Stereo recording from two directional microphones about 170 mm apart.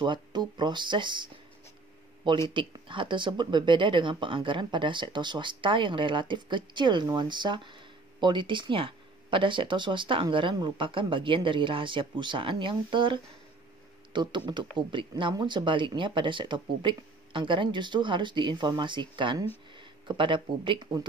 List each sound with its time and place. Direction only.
0.0 s speech: 25° right (ahead or behind)